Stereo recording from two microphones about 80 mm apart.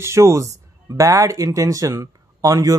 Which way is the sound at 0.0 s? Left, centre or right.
Right.